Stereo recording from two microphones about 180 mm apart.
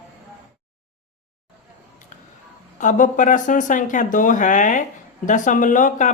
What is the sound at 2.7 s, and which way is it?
Speech, 45° left (ahead or behind).